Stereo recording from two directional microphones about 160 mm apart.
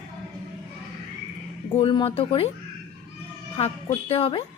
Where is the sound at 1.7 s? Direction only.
30° left (ahead or behind).